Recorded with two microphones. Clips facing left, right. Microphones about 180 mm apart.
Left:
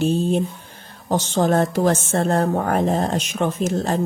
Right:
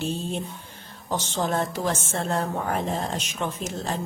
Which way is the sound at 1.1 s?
45° left (ahead or behind).